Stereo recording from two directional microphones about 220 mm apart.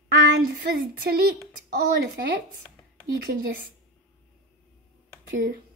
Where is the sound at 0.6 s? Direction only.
45° right (ahead or behind).